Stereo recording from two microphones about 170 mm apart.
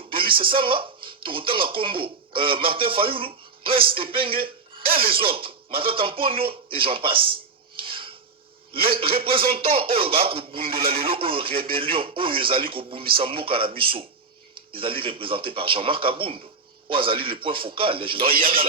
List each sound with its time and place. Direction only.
0.1 s speech: 30° right (ahead or behind)
4.8 s music: 60° right (ahead or behind)
5.3 s speech: 30° right (ahead or behind)
7.8 s filing: 30° right (ahead or behind)
8.7 s a man's voice: 60° right (ahead or behind)
9.5 s speech: 35° right (ahead or behind)
18.3 s a man's voice: 60° right (ahead or behind)